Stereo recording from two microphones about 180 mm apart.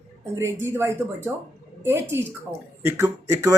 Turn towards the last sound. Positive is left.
turn(degrees=-15)  # may be behind; listen again after turning